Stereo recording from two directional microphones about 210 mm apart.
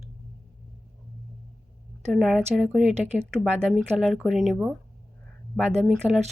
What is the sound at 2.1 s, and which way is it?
A woman's voice, centre (ahead or behind).